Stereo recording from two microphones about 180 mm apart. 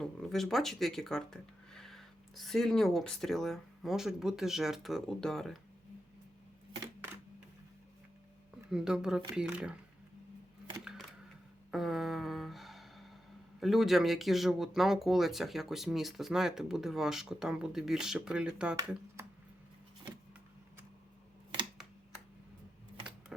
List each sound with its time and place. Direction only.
0.0 s speech: 5° left (ahead or behind)
8.7 s speech: 5° right (ahead or behind)
11.7 s a sound: centre (ahead or behind)
13.6 s speech: centre (ahead or behind)